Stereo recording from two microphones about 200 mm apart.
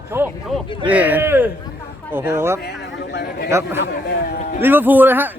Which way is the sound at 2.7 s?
55° left (ahead or behind).